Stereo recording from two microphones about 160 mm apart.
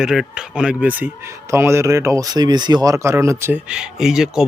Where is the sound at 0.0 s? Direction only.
5° right (ahead or behind).